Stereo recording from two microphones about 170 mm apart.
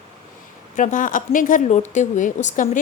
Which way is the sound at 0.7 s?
50° left (ahead or behind).